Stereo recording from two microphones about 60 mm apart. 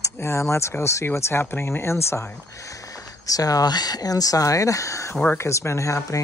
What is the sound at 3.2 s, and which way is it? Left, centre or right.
Speech, left.